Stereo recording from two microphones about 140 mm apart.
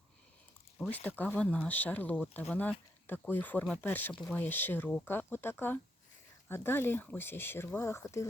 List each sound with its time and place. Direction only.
1.2 s speech: 10° left (ahead or behind)